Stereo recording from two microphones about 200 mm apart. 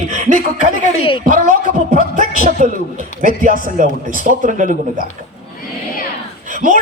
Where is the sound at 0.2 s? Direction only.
35° right (ahead or behind).